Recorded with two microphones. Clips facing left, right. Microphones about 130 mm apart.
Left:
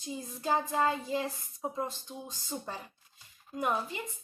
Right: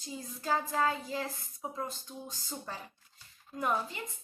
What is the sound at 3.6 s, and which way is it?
Speech, 15° left (ahead or behind).